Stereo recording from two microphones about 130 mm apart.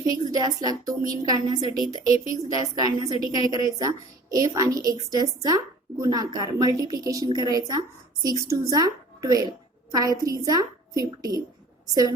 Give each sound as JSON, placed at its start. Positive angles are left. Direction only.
{"t": 0.3, "sound": "a woman's voice", "side_deg": -30}